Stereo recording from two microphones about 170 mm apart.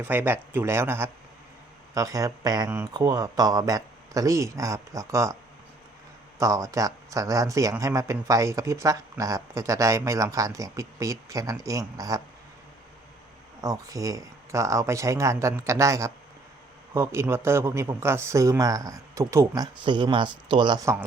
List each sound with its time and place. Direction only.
0.0 s speech: 10° right (ahead or behind)
6.4 s speech: 20° right (ahead or behind)
13.6 s speech: 20° right (ahead or behind)